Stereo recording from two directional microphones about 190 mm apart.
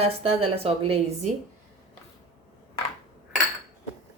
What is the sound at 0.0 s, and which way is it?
A woman's voice, 30° right (ahead or behind).